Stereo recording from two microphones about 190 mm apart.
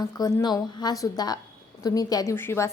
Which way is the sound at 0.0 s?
20° left (ahead or behind).